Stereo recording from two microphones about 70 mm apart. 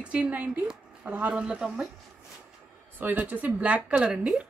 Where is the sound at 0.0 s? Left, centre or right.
Centre.